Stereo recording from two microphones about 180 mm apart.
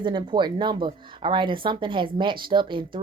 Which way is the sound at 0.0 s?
25° right (ahead or behind).